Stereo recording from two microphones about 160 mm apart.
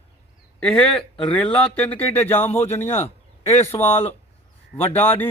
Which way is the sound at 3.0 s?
40° left (ahead or behind).